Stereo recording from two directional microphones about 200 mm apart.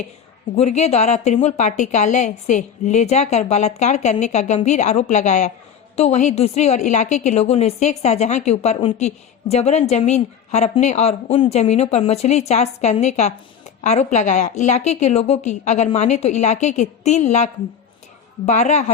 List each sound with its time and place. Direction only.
0.5 s a woman's voice: 35° left (ahead or behind)